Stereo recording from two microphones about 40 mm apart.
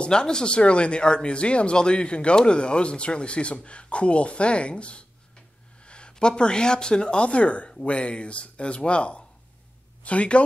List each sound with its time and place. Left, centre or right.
0.0 s a woman's voice: left